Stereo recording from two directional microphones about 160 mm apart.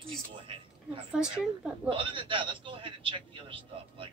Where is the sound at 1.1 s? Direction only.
5° right (ahead or behind).